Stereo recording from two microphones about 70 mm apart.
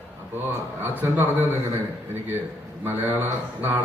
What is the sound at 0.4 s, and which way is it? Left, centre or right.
Speech, right.